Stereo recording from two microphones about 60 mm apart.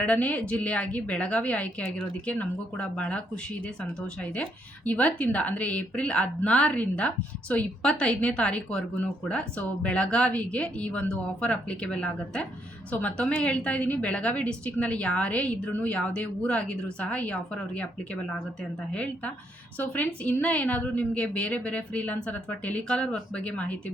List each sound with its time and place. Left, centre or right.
0.0 s a woman's voice: left